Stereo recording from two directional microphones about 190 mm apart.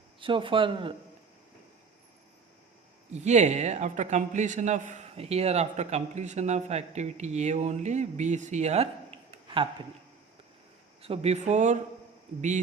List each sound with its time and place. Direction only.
0.2 s speech: 25° right (ahead or behind)
3.1 s a man's voice: 35° right (ahead or behind)
11.0 s a man's voice: 30° right (ahead or behind)